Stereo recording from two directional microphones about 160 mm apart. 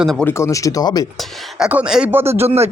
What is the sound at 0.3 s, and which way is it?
Speech, 15° left (ahead or behind).